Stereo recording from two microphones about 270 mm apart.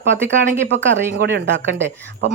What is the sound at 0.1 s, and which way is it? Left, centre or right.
Speech, right.